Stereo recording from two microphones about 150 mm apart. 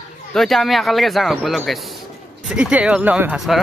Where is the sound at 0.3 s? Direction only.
Centre (ahead or behind).